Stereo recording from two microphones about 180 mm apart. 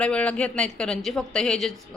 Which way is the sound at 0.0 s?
5° left (ahead or behind).